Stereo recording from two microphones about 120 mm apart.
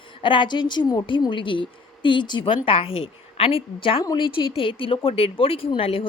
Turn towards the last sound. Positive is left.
turn(degrees=50)  # may be behind; listen again after turning